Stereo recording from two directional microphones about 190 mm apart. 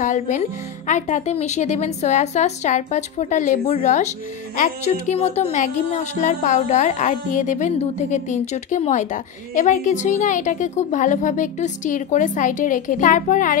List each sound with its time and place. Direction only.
0.0 s a woman's voice: 40° left (ahead or behind)